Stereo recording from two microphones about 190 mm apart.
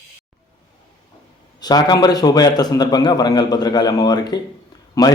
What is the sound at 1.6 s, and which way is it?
A man's voice, 20° left (ahead or behind).